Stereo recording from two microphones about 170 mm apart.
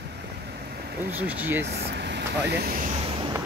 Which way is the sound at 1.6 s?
80° right.